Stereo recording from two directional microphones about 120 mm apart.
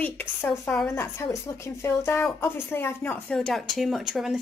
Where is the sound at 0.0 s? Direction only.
15° left (ahead or behind).